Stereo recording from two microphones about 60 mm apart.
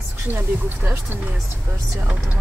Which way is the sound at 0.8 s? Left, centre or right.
Right.